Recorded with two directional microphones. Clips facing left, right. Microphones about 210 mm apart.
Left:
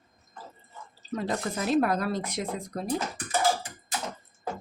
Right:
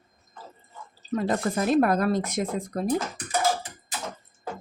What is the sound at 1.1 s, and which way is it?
A woman's voice, 50° right (ahead or behind).